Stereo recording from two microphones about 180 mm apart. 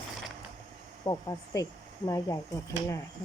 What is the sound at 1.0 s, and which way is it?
Speech, 20° left (ahead or behind).